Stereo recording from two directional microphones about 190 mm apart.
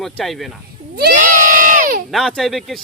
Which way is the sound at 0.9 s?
50° right (ahead or behind).